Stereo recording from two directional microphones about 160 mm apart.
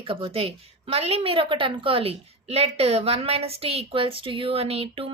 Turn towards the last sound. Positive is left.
turn(degrees=-35)  # may be behind; listen again after turning